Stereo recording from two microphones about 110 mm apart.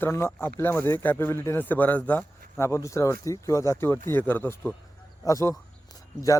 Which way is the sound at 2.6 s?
25° left (ahead or behind).